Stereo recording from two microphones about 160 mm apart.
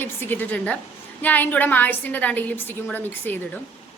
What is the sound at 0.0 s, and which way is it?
A woman's voice, 10° left (ahead or behind).